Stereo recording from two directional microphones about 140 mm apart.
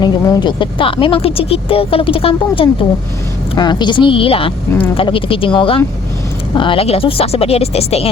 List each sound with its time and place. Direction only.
0.0 s a woman's voice: 30° left (ahead or behind); by 8.1 s 45° left (ahead or behind)